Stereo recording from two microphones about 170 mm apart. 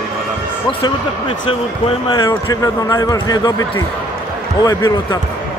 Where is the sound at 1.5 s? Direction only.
30° left (ahead or behind).